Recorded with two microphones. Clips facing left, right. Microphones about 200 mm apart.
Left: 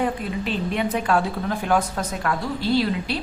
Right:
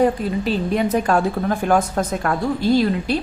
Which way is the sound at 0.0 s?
40° right (ahead or behind).